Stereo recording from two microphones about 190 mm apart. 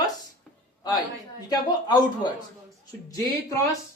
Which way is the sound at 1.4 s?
20° left (ahead or behind).